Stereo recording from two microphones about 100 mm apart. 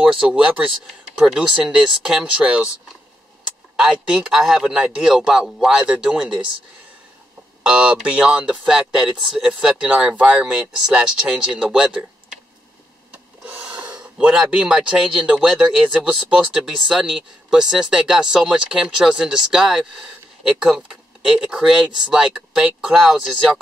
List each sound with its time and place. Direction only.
0.0 s speech: 10° right (ahead or behind)
7.6 s speech: 10° right (ahead or behind)
13.5 s speech: 10° right (ahead or behind)